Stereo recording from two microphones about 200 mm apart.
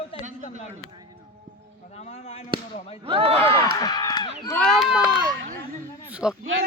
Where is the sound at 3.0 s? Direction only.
30° right (ahead or behind).